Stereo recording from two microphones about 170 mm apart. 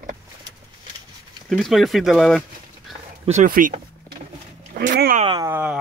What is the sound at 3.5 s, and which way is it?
Speech, 55° right (ahead or behind).